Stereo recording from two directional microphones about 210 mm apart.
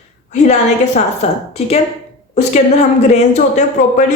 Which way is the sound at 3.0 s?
35° left (ahead or behind).